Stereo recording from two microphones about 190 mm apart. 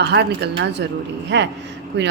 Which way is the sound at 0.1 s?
65° right (ahead or behind).